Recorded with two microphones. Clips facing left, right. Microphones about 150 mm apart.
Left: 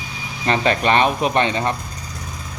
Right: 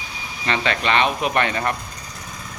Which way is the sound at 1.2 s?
25° left (ahead or behind).